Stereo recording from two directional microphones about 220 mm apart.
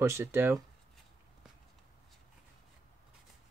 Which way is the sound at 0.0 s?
10° right (ahead or behind).